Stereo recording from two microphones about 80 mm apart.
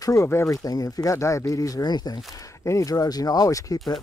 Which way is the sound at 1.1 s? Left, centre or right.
Left.